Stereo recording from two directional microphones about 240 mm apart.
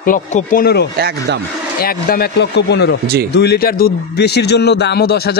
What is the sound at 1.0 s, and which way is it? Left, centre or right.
Speech, right.